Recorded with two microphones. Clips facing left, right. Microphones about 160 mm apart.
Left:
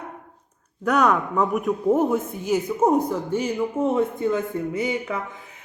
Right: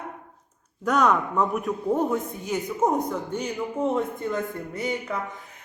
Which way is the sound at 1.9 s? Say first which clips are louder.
Left 4 dB; 20° left (ahead or behind).